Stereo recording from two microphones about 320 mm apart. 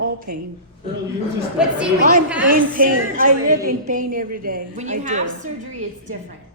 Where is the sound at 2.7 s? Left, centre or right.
Right.